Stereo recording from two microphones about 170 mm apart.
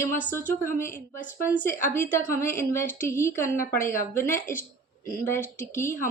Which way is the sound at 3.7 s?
50° left (ahead or behind).